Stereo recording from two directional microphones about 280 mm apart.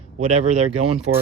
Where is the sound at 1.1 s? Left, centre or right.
Right.